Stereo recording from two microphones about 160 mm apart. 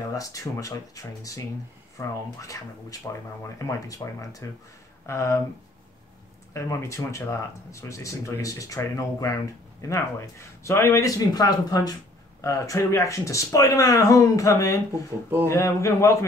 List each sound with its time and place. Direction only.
0.1 s speech: 20° left (ahead or behind)
6.5 s speech: 15° left (ahead or behind)